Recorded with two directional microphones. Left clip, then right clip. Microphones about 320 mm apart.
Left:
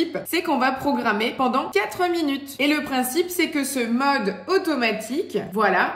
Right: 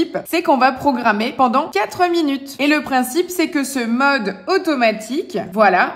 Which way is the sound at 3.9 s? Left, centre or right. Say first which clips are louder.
Right 6 dB; right.